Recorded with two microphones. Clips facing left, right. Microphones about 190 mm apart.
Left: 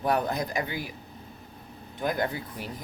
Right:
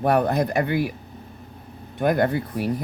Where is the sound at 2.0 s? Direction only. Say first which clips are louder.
Right 8 dB; 60° right (ahead or behind).